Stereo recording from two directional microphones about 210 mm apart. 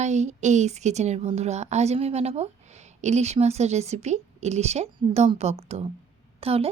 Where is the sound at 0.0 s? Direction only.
35° right (ahead or behind).